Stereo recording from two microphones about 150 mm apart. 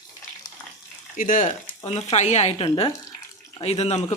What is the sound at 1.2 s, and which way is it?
Speech, 60° left (ahead or behind).